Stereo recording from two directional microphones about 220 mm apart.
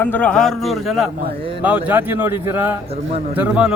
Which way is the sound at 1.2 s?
25° right (ahead or behind).